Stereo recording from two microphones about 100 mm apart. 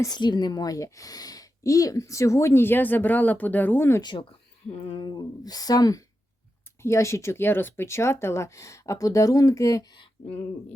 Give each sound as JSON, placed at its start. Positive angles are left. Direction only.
{"t": 0.0, "sound": "a woman's voice", "side_deg": 45}
{"t": 4.0, "sound": "speech", "side_deg": 55}
{"t": 4.9, "sound": "a woman's voice", "side_deg": 45}